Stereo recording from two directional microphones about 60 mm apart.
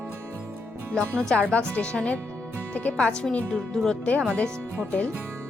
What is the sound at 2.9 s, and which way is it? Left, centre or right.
Speech, centre.